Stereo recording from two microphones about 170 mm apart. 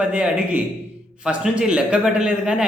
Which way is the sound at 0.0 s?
5° right (ahead or behind).